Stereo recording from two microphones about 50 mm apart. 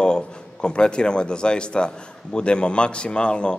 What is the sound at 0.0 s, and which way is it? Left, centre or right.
A man's voice, centre.